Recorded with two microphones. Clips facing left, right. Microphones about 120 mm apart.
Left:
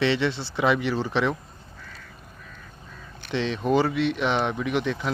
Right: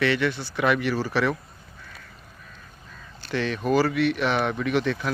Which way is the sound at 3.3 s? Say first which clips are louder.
Even; 20° left (ahead or behind).